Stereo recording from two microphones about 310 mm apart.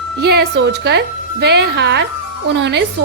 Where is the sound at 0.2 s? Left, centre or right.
Right.